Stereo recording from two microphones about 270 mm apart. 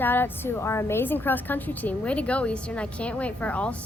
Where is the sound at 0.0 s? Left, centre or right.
Centre.